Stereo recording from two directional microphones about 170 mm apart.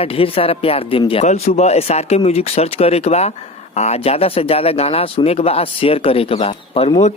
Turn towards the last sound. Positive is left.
turn(degrees=35)  # may be behind; listen again after turning